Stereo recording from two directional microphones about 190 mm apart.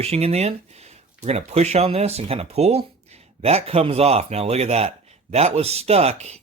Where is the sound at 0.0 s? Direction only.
35° right (ahead or behind).